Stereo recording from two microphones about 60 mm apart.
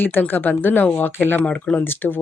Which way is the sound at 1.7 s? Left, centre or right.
Left.